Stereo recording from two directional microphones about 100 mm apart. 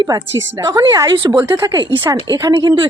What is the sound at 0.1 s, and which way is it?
Speech, 40° right (ahead or behind).